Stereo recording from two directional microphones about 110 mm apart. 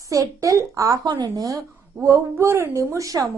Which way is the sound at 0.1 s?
30° right (ahead or behind).